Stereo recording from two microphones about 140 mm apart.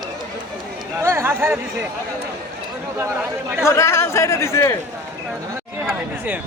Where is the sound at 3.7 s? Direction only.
20° left (ahead or behind).